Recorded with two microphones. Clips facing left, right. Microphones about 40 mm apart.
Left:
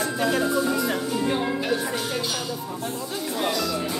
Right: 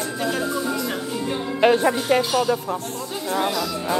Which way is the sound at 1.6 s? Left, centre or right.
Right.